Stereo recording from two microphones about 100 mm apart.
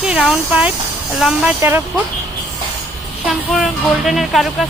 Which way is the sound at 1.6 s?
25° right (ahead or behind).